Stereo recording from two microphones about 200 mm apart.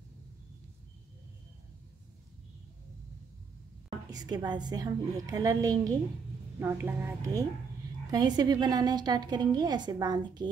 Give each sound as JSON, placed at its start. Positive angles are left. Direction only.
{"t": 4.1, "sound": "a woman's voice", "side_deg": -20}